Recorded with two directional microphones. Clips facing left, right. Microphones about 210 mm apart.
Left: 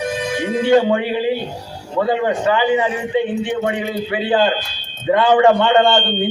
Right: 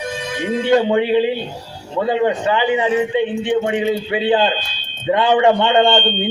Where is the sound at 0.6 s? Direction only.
20° right (ahead or behind).